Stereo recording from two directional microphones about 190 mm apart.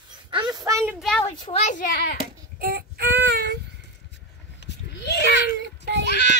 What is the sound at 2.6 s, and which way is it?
Child singing, 55° right (ahead or behind).